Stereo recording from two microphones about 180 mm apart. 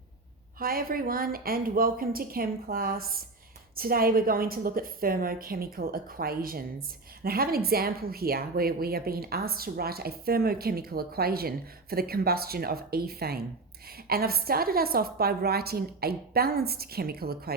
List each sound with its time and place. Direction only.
0.6 s a woman's voice: 55° right (ahead or behind)